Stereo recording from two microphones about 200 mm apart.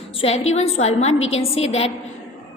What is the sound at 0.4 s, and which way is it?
A woman's voice, 30° left (ahead or behind).